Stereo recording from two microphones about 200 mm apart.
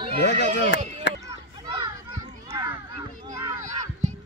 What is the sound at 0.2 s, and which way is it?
Speech, 60° left (ahead or behind).